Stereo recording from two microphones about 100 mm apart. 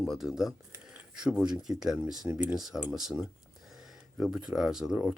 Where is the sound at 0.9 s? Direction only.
10° right (ahead or behind).